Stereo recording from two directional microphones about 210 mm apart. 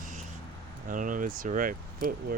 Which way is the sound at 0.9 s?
40° right (ahead or behind).